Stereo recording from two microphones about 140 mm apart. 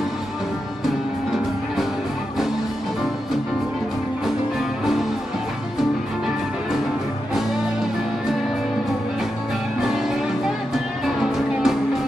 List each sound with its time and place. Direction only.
0.8 s music: centre (ahead or behind)
9.8 s music: 5° right (ahead or behind)